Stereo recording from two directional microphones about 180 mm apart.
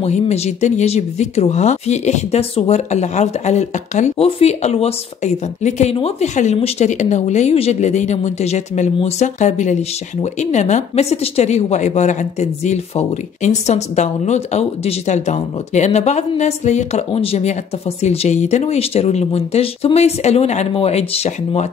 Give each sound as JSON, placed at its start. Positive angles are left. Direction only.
{"t": 0.0, "sound": "speech", "side_deg": 35}